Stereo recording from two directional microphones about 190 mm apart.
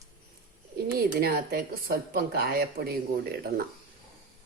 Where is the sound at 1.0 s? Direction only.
50° right (ahead or behind).